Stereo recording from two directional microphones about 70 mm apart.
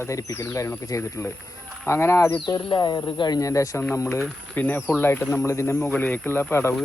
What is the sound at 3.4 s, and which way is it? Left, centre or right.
Speech, left.